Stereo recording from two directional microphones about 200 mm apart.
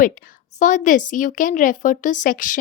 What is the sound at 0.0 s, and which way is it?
A woman's voice, 40° left (ahead or behind).